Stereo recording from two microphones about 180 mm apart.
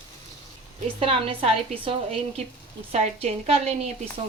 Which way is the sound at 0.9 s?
30° right (ahead or behind).